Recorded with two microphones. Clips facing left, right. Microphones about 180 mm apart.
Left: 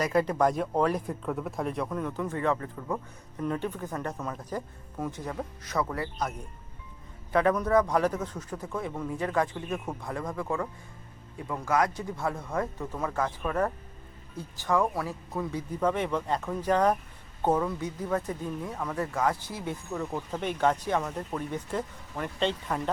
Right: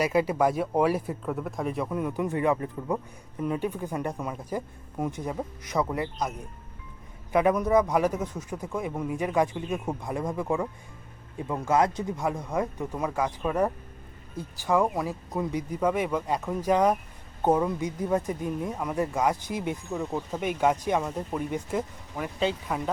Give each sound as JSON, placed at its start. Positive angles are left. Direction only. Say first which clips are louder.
{"t": 0.0, "sound": "speech", "louder": "right 1 dB", "side_deg": -5}
{"t": 7.3, "sound": "speech", "louder": "right 2 dB", "side_deg": -10}